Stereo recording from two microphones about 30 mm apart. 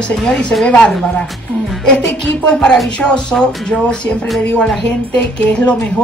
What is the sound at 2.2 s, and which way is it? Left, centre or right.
Speech, left.